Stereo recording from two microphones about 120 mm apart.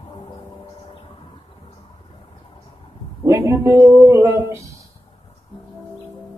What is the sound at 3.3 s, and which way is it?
Speech, 25° right (ahead or behind).